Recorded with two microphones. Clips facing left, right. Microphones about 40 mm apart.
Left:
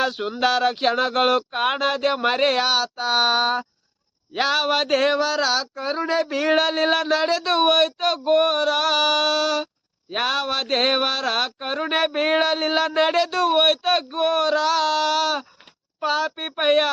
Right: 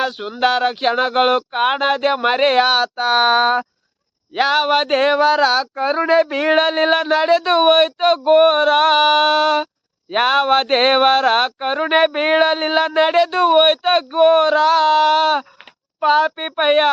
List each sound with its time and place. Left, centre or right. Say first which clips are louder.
0.0 s speech: right 2 dB; centre
0.3 s speech: right 4 dB; centre
4.4 s speech: right 5 dB; centre